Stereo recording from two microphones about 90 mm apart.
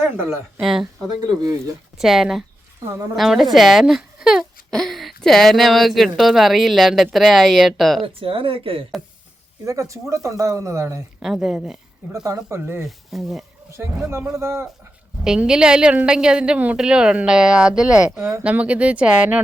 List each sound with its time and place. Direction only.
0.0 s a woman's voice: 25° right (ahead or behind)
0.6 s a woman's voice: 5° right (ahead or behind)
1.0 s speech: 45° right (ahead or behind)
2.0 s a woman's voice: 5° right (ahead or behind)
8.0 s speech: 85° right
9.6 s speech: 35° right (ahead or behind)
11.2 s speech: 5° right (ahead or behind)
12.2 s speech: 35° right (ahead or behind)
13.1 s a woman's voice: centre (ahead or behind)
13.7 s speech: 30° right (ahead or behind)
15.2 s a woman's voice: 5° right (ahead or behind)
18.1 s a woman's voice: 25° right (ahead or behind)